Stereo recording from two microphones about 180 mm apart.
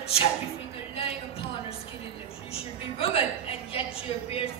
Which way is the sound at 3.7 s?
30° left (ahead or behind).